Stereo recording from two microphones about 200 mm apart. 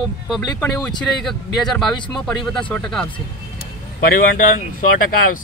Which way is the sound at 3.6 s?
50° left (ahead or behind).